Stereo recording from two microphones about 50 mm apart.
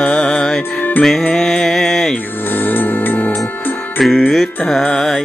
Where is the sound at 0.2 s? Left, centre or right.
Centre.